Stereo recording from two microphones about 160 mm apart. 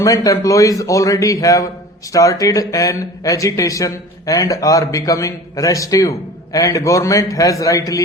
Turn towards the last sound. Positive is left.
turn(degrees=20)  # may be behind; listen again after turning